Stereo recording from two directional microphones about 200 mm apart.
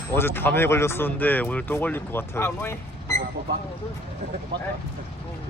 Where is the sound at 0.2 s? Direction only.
10° left (ahead or behind).